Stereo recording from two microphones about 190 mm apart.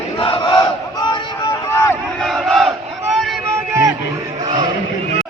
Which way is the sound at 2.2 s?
Centre (ahead or behind).